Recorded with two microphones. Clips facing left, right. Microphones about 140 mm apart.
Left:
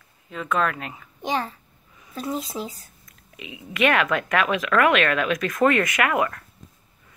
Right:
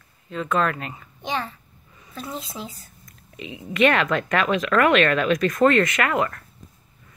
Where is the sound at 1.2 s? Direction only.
40° left (ahead or behind).